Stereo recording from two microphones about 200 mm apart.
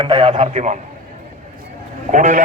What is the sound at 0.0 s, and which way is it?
Speech, 25° right (ahead or behind).